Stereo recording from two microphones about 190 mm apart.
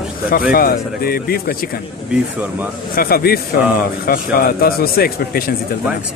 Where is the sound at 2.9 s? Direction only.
50° left (ahead or behind).